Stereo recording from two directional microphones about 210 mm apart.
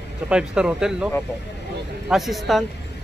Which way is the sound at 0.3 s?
5° right (ahead or behind).